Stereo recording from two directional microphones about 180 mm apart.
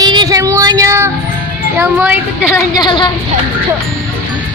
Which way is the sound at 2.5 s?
20° left (ahead or behind).